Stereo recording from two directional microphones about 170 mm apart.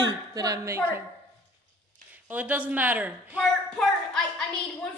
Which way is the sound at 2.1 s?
10° right (ahead or behind).